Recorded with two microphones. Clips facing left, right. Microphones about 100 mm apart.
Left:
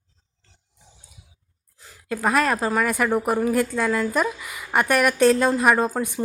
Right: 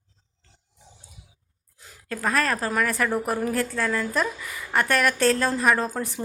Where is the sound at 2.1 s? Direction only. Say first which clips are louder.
Left 4 dB; 15° left (ahead or behind).